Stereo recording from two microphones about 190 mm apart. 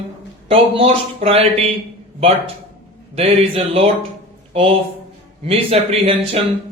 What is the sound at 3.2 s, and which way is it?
Speech, 30° right (ahead or behind).